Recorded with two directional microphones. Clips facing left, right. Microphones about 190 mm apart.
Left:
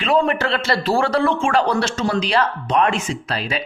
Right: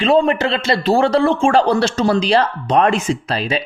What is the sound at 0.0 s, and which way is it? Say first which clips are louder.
A man's voice: right 4 dB; 25° right (ahead or behind).